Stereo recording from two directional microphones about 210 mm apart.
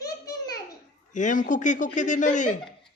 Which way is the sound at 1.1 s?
35° left (ahead or behind).